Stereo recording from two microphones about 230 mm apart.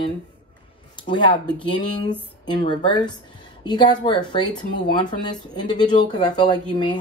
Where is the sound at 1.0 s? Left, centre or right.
Left.